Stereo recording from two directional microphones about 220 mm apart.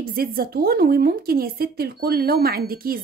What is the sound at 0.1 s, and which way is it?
Speech, 40° right (ahead or behind).